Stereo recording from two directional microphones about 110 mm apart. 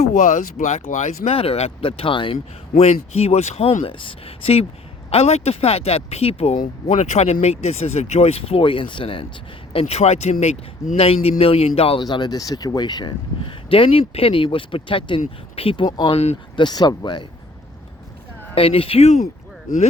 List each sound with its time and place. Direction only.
0.0 s speech: 90° left; by 4.6 s 60° left (ahead or behind)
5.1 s speech: 75° left (ahead or behind); by 9.2 s 50° left (ahead or behind)
9.7 s speech: 75° left (ahead or behind)
10.9 s speech: 60° left (ahead or behind)
12.0 s speech: 40° left (ahead or behind)
13.7 s speech: 55° left (ahead or behind)
15.8 s speech: 40° left (ahead or behind)
16.1 s speech: 80° left
16.6 s speech: 40° left (ahead or behind)
18.5 s speech: 55° left (ahead or behind); by 19.2 s 75° left (ahead or behind)